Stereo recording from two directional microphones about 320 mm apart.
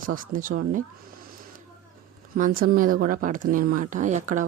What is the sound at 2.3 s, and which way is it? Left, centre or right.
A woman's voice, right.